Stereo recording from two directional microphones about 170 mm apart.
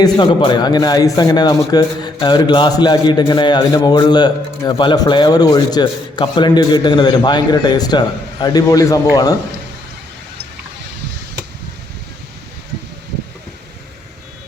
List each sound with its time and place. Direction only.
0.0 s a man's voice: 25° left (ahead or behind)